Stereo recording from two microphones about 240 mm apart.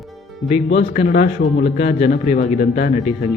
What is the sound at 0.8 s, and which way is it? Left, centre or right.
Speech, left.